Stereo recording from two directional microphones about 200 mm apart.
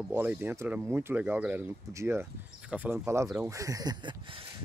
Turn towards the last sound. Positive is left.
turn(degrees=-20)  # may be behind; listen again after turning